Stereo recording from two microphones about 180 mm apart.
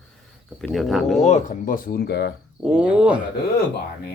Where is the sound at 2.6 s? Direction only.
5° right (ahead or behind).